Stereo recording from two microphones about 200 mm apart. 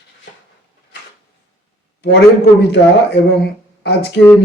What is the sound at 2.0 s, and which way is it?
Speech, 55° left (ahead or behind).